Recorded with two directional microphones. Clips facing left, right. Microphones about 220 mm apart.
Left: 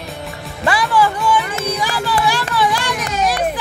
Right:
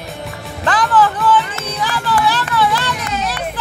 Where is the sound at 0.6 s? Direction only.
10° left (ahead or behind).